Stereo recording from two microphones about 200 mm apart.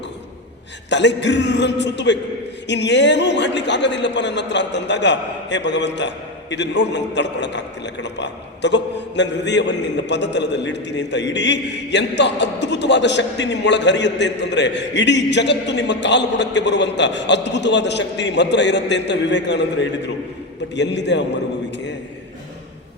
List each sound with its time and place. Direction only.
0.9 s a man's voice: 60° left (ahead or behind)